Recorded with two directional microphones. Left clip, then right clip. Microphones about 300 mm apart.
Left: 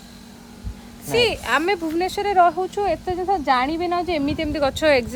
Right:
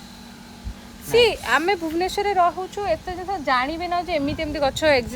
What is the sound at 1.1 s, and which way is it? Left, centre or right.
Speech, centre.